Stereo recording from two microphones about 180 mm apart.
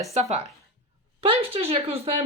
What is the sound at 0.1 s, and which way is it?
Speech, 35° right (ahead or behind).